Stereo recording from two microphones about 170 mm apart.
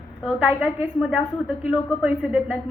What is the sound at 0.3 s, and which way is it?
A woman's voice, 5° right (ahead or behind).